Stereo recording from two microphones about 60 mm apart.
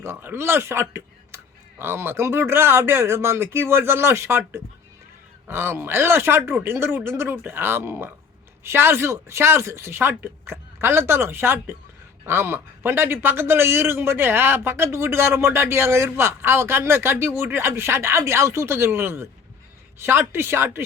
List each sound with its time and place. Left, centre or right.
0.0 s a man's voice: right